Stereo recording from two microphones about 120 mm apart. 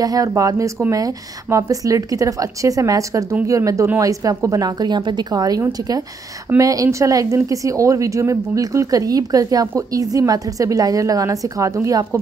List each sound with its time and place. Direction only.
0.0 s a woman's voice: 30° right (ahead or behind)